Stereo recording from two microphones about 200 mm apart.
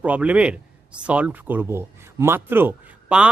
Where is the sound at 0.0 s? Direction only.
5° right (ahead or behind).